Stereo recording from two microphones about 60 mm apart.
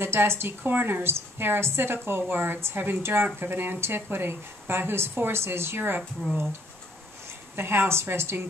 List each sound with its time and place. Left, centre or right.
0.0 s speech: right
5.8 s speech: right
7.5 s speech: right